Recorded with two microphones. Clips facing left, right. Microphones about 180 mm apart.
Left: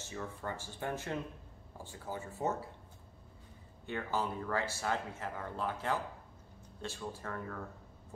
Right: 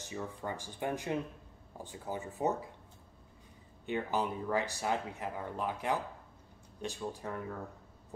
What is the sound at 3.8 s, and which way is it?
Speech, 15° right (ahead or behind).